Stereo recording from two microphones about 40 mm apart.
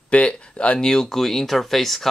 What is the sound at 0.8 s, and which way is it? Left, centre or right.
Speech, centre.